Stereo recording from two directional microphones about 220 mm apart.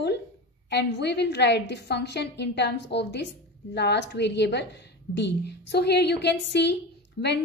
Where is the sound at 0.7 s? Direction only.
50° left (ahead or behind).